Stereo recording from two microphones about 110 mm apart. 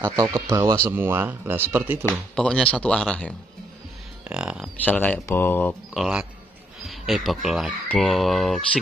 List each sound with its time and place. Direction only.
0.0 s speech: 35° right (ahead or behind)
2.3 s speech: 5° left (ahead or behind)
4.3 s speech: 5° right (ahead or behind)
4.8 s speech: 15° left (ahead or behind)
5.9 s speech: 5° right (ahead or behind)